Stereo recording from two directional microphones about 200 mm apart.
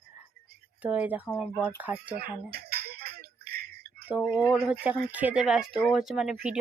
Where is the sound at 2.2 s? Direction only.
50° right (ahead or behind).